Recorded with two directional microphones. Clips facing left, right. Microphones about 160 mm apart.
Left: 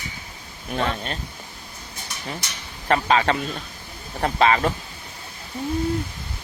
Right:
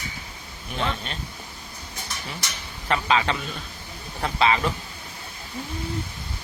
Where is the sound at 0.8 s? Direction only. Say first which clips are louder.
Left 3 dB; 45° left (ahead or behind).